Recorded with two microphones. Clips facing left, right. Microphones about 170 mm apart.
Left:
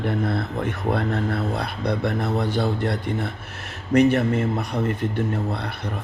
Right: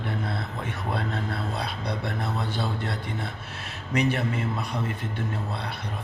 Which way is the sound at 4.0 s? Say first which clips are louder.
Left 7 dB; 60° left (ahead or behind).